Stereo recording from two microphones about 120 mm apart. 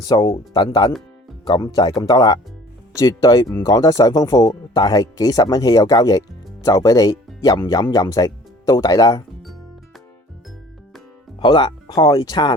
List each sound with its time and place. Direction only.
0.0 s speech: 30° left (ahead or behind)
11.3 s speech: 35° left (ahead or behind)